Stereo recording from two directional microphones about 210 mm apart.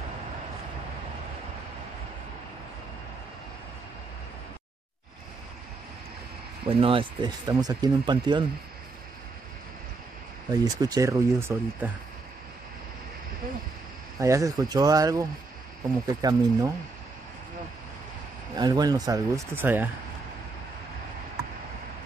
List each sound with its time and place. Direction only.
6.7 s speech: 25° right (ahead or behind)
10.5 s speech: 15° right (ahead or behind)
14.2 s speech: 15° right (ahead or behind)
18.5 s speech: 20° right (ahead or behind)